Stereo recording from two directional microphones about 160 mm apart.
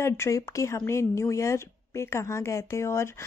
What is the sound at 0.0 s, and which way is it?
Speech, 20° left (ahead or behind).